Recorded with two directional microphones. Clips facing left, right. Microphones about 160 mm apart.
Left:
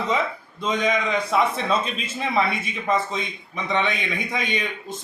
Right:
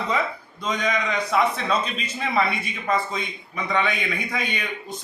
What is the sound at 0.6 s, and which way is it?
Speech, centre (ahead or behind).